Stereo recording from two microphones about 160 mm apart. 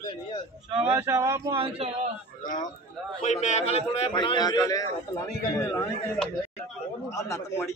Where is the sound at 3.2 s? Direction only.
45° left (ahead or behind).